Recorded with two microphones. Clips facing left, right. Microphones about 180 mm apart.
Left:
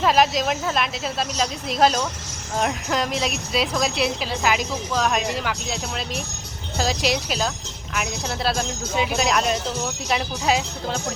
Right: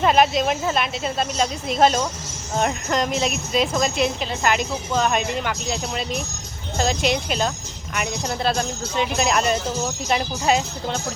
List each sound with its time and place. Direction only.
0.0 s speech: centre (ahead or behind)